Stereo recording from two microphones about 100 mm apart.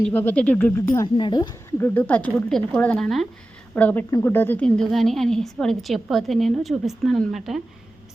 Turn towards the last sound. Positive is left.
turn(degrees=0)  # may be behind; listen again after turning